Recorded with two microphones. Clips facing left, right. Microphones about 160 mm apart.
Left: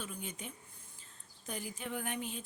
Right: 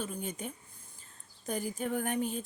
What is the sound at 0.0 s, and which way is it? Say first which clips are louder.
Speech: right 6 dB; 40° right (ahead or behind).